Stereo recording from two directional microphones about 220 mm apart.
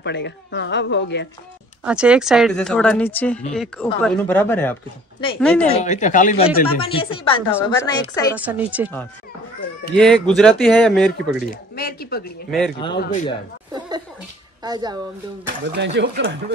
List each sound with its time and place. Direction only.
0.0 s speech: 50° left (ahead or behind)
1.9 s speech: 5° right (ahead or behind)
5.7 s speech: 30° left (ahead or behind); by 8.3 s 15° left (ahead or behind)
8.4 s speech: 5° right (ahead or behind)
9.9 s speech: 5° left (ahead or behind)
11.7 s speech: 45° left (ahead or behind)
12.4 s speech: centre (ahead or behind)
12.7 s speech: 20° left (ahead or behind)
13.0 s speech: 35° left (ahead or behind)
13.7 s chuckle: 20° right (ahead or behind)
14.6 s speech: 20° right (ahead or behind)
15.6 s speech: 50° right (ahead or behind)